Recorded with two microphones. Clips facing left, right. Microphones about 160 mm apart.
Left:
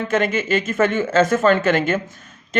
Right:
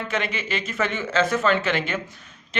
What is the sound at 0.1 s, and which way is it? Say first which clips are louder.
A man's voice: left 10 dB; 45° left (ahead or behind).